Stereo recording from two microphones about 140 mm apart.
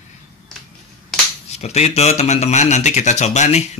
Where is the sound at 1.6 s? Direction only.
50° left (ahead or behind).